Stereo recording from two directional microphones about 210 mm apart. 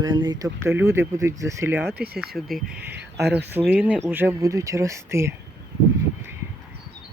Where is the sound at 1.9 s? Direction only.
50° right (ahead or behind).